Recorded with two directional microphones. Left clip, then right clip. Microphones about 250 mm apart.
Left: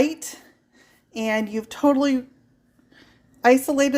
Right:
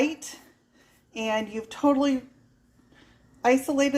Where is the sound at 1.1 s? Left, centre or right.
Left.